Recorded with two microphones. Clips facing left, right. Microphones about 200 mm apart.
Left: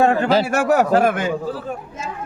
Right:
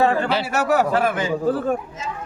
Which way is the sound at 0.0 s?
45° left (ahead or behind).